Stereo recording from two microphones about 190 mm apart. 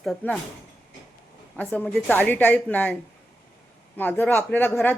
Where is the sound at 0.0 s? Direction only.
5° left (ahead or behind).